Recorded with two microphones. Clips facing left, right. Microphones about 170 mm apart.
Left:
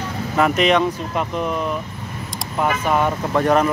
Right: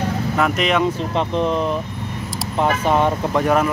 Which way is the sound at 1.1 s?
30° right (ahead or behind).